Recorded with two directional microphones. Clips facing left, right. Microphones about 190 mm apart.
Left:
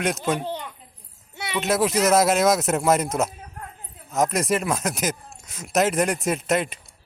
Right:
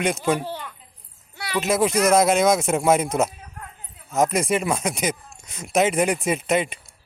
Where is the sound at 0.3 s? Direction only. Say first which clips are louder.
Left 1 dB; 20° left (ahead or behind).